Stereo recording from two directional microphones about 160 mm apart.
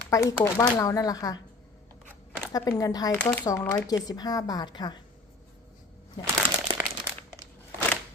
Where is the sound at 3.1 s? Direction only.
10° left (ahead or behind).